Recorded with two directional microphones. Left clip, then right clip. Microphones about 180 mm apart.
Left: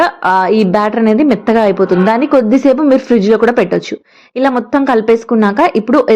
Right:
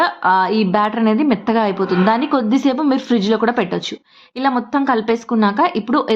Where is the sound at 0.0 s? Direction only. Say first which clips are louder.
Left 4 dB; 15° left (ahead or behind).